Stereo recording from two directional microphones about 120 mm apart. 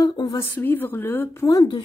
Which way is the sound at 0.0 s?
35° left (ahead or behind).